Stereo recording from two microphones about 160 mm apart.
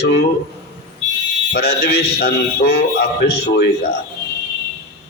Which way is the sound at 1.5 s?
90° left.